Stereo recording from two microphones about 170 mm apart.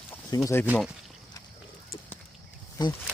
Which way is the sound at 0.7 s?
5° right (ahead or behind).